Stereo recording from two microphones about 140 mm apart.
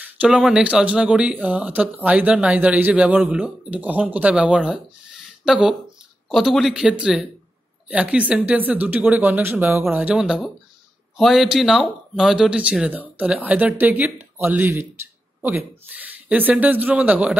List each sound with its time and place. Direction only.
0.2 s speech: 5° right (ahead or behind)
16.3 s speech: 10° right (ahead or behind)